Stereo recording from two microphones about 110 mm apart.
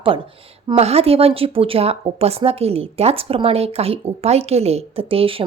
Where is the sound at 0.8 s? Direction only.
70° right (ahead or behind).